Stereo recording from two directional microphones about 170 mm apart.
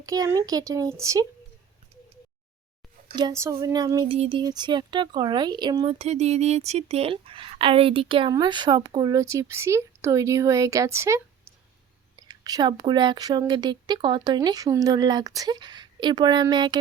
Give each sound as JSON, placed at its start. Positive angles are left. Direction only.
{"t": 0.0, "sound": "speech", "side_deg": -20}
{"t": 3.2, "sound": "speech", "side_deg": -20}
{"t": 4.1, "sound": "speech", "side_deg": -30}